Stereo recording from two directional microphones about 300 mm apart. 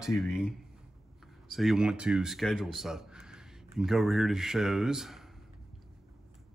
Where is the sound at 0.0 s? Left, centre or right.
Centre.